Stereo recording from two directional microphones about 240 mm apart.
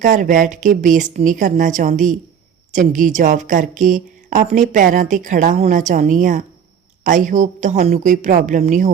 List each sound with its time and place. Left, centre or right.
0.0 s speech: right